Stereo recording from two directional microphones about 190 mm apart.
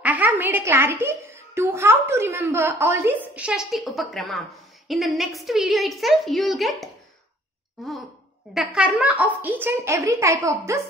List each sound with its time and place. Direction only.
0.0 s a child's voice: 10° right (ahead or behind)